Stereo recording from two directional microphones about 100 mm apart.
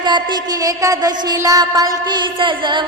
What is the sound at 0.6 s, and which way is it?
Mantra, 35° right (ahead or behind).